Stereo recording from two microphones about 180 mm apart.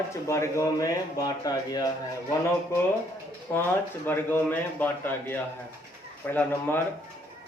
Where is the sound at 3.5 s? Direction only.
10° left (ahead or behind).